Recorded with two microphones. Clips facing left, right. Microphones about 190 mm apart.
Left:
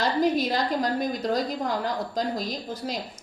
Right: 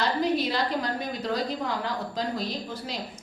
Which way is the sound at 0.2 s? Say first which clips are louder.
Left 2 dB; 45° left (ahead or behind).